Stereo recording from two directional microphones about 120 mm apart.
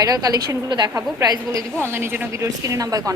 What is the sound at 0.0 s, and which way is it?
A woman's voice, 35° right (ahead or behind).